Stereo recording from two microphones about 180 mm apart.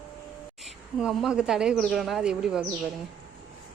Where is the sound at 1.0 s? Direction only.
Centre (ahead or behind).